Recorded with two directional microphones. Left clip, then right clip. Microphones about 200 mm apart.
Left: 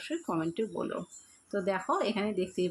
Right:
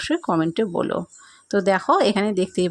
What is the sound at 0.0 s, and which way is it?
A woman's voice, 45° right (ahead or behind).